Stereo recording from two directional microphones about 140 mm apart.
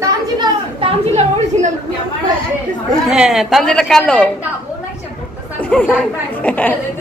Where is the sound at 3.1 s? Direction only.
5° right (ahead or behind).